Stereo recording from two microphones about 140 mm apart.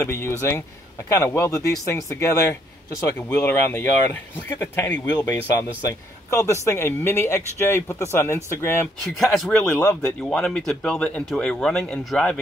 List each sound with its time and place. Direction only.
0.0 s speech: 20° left (ahead or behind)
9.0 s speech: centre (ahead or behind)